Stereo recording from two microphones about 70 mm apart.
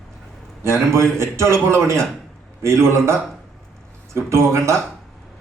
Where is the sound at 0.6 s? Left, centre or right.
Right.